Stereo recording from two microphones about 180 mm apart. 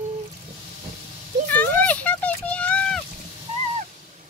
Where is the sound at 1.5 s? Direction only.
10° left (ahead or behind).